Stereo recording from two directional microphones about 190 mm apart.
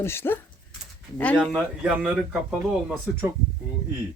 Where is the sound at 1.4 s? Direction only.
5° right (ahead or behind).